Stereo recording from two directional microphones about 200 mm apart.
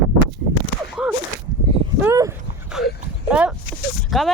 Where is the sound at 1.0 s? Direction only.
5° right (ahead or behind).